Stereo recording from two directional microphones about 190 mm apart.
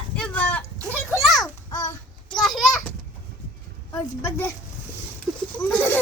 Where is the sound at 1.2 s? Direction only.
Centre (ahead or behind).